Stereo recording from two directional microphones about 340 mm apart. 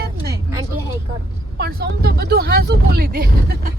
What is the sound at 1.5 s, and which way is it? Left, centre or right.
Vehicle, right.